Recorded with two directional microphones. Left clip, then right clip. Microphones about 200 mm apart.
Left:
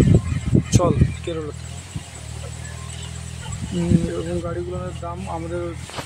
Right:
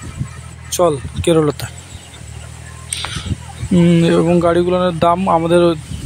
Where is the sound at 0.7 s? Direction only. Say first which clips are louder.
Right 8 dB; 20° right (ahead or behind).